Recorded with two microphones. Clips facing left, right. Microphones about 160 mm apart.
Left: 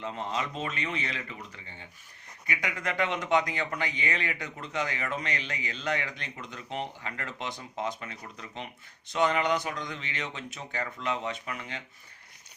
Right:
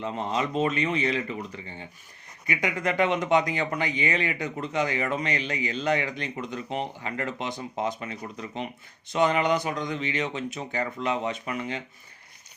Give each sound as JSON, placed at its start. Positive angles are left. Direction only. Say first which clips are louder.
{"t": 0.0, "sound": "speech", "louder": "right 5 dB", "side_deg": -15}